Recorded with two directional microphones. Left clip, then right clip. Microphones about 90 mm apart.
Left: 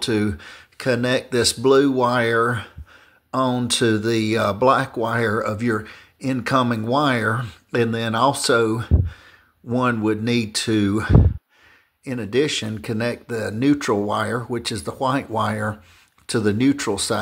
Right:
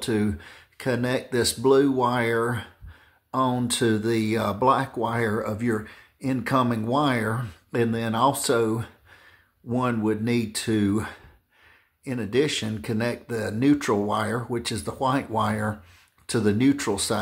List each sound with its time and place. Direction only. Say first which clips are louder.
0.0 s speech: left 4 dB; 20° left (ahead or behind)